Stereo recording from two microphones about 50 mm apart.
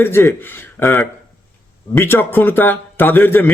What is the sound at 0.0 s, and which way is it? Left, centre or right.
Speech, left.